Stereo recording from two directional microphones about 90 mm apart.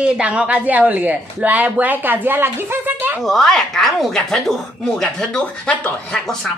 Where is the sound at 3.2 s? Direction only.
5° left (ahead or behind).